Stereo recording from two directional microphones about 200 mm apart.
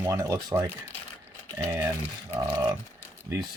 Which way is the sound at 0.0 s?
15° right (ahead or behind).